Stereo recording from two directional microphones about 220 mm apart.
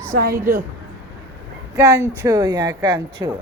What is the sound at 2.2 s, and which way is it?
Speech, 15° right (ahead or behind).